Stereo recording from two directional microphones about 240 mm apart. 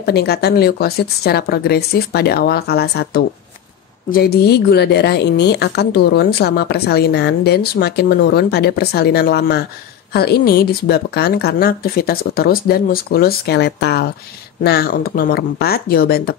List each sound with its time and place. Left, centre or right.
0.0 s a woman's voice: left